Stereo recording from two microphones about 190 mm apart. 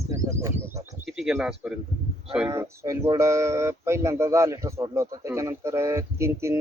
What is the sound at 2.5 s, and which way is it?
Speech, 15° right (ahead or behind).